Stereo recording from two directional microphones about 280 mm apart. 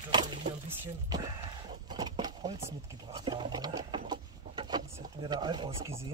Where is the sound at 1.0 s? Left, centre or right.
Centre.